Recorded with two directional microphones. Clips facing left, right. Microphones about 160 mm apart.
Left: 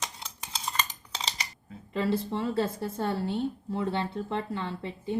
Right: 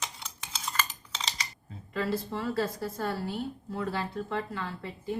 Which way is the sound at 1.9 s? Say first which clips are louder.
Left 3 dB; 25° left (ahead or behind).